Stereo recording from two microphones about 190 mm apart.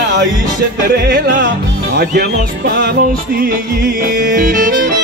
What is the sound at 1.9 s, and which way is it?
Speech, 55° right (ahead or behind).